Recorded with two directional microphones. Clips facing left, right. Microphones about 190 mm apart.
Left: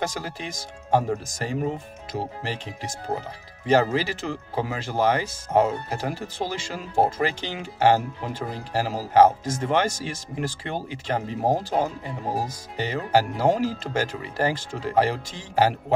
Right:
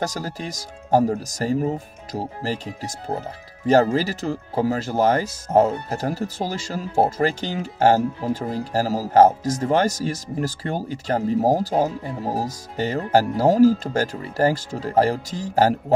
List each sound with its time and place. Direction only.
0.0 s speech: 40° right (ahead or behind)